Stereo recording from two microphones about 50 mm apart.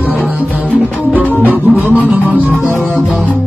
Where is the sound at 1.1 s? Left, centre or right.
Right.